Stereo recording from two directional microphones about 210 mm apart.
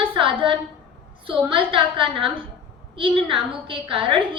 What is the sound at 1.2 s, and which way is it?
A woman's voice, 25° right (ahead or behind).